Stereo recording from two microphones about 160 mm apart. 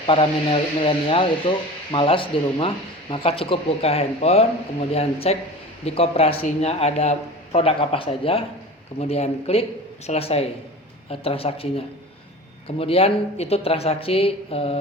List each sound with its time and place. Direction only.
0.1 s speech: 35° left (ahead or behind)